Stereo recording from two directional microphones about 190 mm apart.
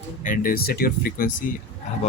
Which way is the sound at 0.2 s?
45° left (ahead or behind).